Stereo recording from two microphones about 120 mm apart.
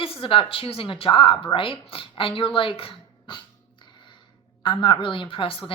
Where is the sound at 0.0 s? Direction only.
50° left (ahead or behind).